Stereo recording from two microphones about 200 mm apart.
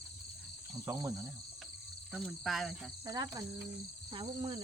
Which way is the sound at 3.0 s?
20° right (ahead or behind).